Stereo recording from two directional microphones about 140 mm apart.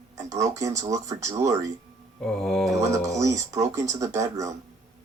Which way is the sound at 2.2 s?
5° left (ahead or behind).